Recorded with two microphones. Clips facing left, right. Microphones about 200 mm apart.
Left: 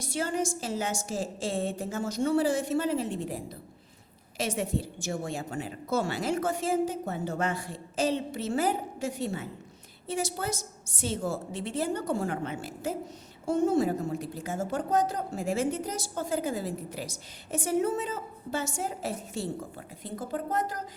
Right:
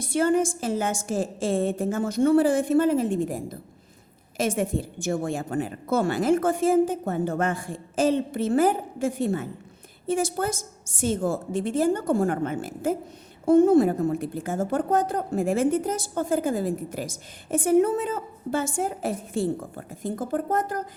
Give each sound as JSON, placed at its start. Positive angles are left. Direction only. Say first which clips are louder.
{"t": 0.0, "sound": "a woman's voice", "louder": "right 8 dB", "side_deg": -55}